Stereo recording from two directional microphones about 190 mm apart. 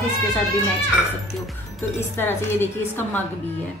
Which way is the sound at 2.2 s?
10° left (ahead or behind).